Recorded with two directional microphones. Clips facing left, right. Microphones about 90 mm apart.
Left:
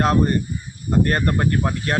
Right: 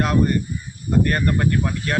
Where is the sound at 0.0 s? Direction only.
35° left (ahead or behind).